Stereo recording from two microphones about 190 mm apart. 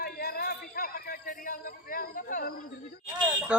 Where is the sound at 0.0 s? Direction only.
50° left (ahead or behind).